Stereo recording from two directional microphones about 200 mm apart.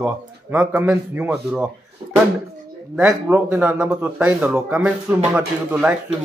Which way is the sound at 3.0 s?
10° right (ahead or behind).